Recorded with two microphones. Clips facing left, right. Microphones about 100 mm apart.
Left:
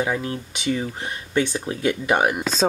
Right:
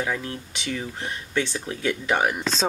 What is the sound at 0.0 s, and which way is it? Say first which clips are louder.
Speech: left 4 dB; 20° left (ahead or behind).